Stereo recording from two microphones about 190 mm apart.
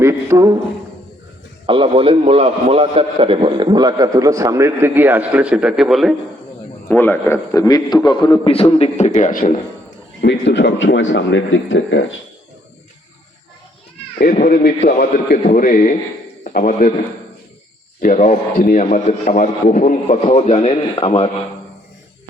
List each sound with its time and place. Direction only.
0.0 s a man's voice: 15° right (ahead or behind)
1.6 s a man's voice: 25° right (ahead or behind); by 6.1 s centre (ahead or behind)
6.8 s a man's voice: 10° left (ahead or behind); by 9.6 s 45° left (ahead or behind)
10.2 s speech: 65° left (ahead or behind)
14.2 s a man's voice: 45° left (ahead or behind)
18.0 s a man's voice: 40° left (ahead or behind)